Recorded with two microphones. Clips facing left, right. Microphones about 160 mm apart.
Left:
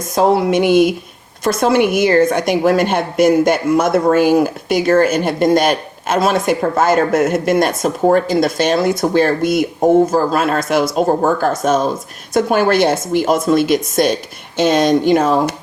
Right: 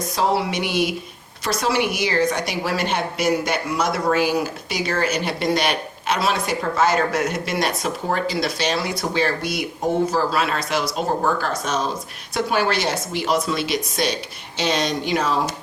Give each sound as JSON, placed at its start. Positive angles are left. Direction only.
{"t": 0.1, "sound": "a woman's voice", "side_deg": 50}